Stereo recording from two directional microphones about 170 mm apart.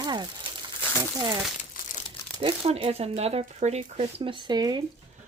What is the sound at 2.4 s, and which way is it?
Speech, 35° right (ahead or behind).